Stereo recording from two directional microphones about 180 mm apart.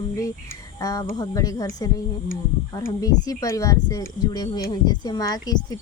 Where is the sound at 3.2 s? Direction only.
20° left (ahead or behind).